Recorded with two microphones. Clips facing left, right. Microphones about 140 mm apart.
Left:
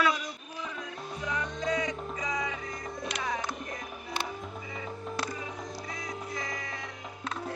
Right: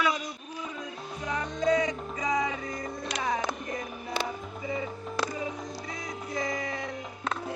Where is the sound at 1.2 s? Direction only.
40° right (ahead or behind).